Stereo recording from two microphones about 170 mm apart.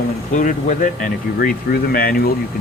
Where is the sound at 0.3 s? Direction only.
50° left (ahead or behind).